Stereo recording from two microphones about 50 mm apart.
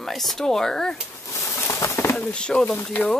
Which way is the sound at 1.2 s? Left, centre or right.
Left.